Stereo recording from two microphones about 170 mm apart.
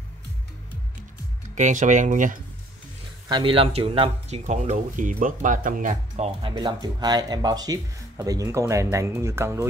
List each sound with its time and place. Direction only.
1.5 s speech: 45° right (ahead or behind)
3.3 s speech: 30° right (ahead or behind)
6.5 s speech: 25° right (ahead or behind)